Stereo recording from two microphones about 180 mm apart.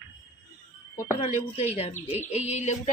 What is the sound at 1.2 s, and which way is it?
A woman's voice, 40° left (ahead or behind).